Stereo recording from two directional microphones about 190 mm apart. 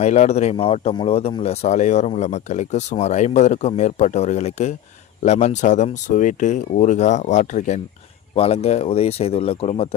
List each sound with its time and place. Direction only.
0.0 s speech: 40° left (ahead or behind)